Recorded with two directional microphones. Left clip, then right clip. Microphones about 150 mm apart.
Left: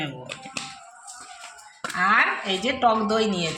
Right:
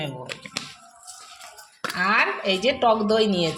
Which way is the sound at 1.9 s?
55° right (ahead or behind).